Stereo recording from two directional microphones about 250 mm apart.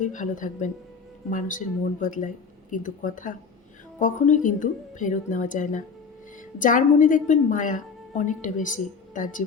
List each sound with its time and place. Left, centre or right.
0.0 s a woman's voice: left